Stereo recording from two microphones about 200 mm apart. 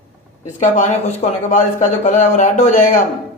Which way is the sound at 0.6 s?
35° left (ahead or behind).